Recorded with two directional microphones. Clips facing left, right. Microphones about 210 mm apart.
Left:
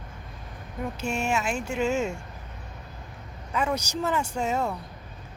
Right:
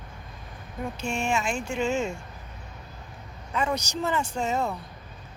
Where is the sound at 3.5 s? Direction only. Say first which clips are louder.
Even; 10° left (ahead or behind).